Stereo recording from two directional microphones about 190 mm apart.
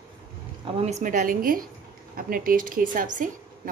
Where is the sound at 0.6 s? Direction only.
35° right (ahead or behind).